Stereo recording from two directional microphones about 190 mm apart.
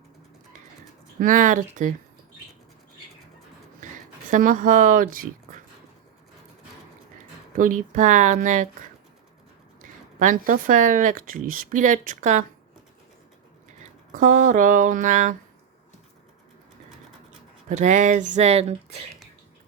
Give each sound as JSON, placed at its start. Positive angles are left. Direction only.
{"t": 1.2, "sound": "speech", "side_deg": -45}
{"t": 4.3, "sound": "speech", "side_deg": -45}
{"t": 7.5, "sound": "speech", "side_deg": -45}
{"t": 9.8, "sound": "speech", "side_deg": -45}
{"t": 13.8, "sound": "speech", "side_deg": -45}
{"t": 17.7, "sound": "speech", "side_deg": -40}